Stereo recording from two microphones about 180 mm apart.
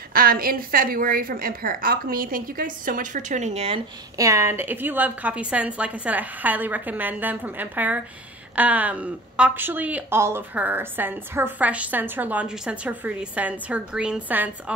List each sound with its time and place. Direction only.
0.1 s a woman's voice: 55° right (ahead or behind); by 3.8 s 35° right (ahead or behind)
4.2 s a woman's voice: 15° right (ahead or behind)